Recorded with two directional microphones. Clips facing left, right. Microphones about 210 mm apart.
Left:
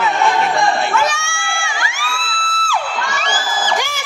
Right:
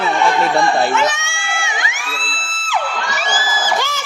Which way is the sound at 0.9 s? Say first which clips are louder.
Right 1 dB; 20° right (ahead or behind).